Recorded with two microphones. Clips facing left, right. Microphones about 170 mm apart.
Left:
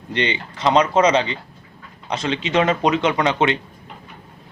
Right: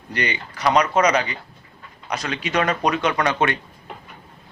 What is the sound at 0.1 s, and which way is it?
Speech, 25° left (ahead or behind).